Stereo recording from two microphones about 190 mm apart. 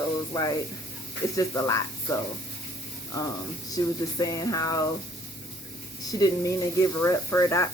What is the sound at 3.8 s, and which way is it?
Speech, 20° left (ahead or behind).